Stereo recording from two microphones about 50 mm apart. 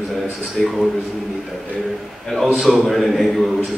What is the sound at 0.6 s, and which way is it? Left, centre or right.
Speech, centre.